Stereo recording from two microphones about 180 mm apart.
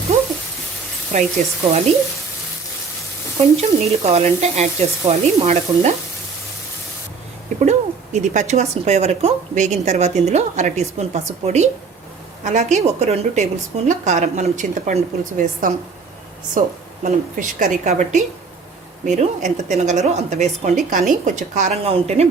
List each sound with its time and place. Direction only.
0.1 s a sound: 40° right (ahead or behind)
1.1 s a woman's voice: 45° right (ahead or behind)
3.6 s speech: 35° right (ahead or behind)
7.6 s a woman's voice: 40° right (ahead or behind)